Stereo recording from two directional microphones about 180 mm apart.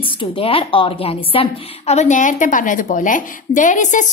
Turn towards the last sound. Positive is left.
turn(degrees=45)  # may be behind; listen again after turning